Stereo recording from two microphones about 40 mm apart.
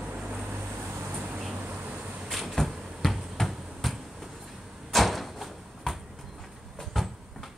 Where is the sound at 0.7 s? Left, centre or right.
Right.